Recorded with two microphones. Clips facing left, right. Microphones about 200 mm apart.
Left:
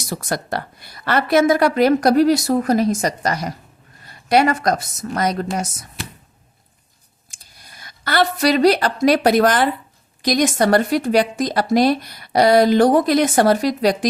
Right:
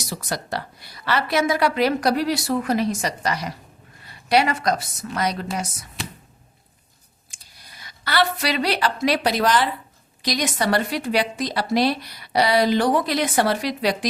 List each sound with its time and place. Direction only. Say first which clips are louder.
0.0 s speech: left 5 dB; 50° left (ahead or behind)
7.3 s speech: left 2 dB; 50° left (ahead or behind)